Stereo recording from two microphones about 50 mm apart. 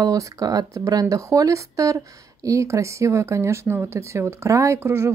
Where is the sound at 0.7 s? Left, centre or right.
Right.